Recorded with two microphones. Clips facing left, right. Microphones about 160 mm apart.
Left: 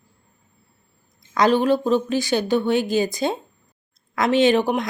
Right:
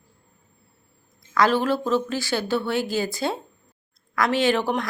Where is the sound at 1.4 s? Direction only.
20° left (ahead or behind).